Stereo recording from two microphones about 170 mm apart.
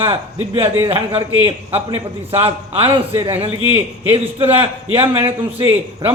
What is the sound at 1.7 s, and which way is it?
A man's voice, 35° right (ahead or behind).